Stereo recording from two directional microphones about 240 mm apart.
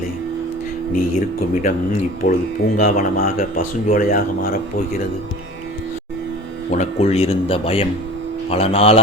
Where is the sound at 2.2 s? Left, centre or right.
Left.